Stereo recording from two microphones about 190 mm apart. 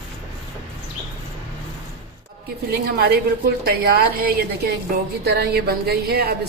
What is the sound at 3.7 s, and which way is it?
A woman's voice, 55° right (ahead or behind).